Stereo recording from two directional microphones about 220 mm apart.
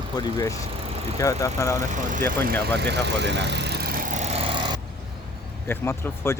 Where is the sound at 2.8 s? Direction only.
50° right (ahead or behind); by 4.5 s 30° right (ahead or behind).